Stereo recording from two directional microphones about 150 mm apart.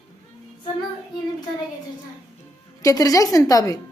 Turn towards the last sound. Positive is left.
turn(degrees=25)  # may be behind; listen again after turning